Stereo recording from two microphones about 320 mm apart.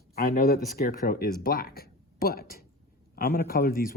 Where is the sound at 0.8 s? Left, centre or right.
Left.